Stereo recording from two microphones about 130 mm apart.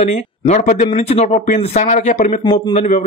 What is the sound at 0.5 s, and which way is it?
Speech, 60° left (ahead or behind).